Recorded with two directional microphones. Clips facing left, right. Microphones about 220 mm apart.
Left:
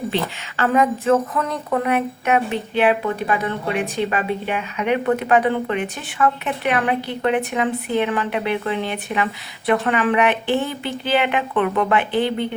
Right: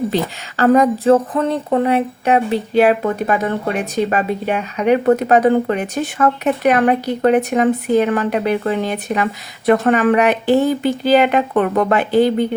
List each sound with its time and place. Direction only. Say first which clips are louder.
0.1 s a woman's voice: right 4 dB; 40° right (ahead or behind)